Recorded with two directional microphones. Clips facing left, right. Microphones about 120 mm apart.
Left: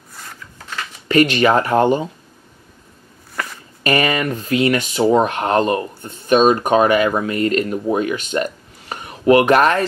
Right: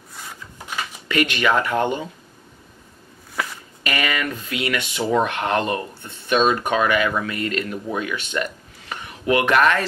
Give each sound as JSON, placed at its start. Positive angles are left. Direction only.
{"t": 0.1, "sound": "a sound", "side_deg": -5}
{"t": 1.0, "sound": "speech", "side_deg": 35}
{"t": 3.8, "sound": "speech", "side_deg": 40}